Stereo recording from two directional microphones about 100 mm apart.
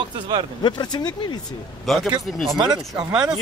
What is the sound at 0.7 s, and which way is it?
Speech, 45° left (ahead or behind).